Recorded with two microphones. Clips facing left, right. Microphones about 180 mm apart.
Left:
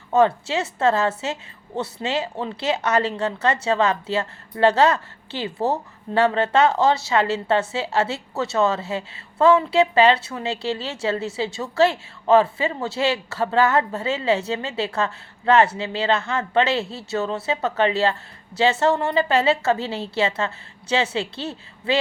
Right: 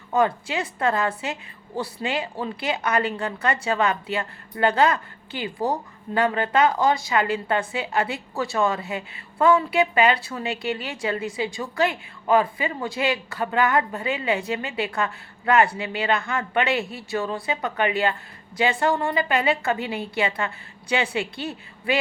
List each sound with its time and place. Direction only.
0.1 s speech: 30° left (ahead or behind)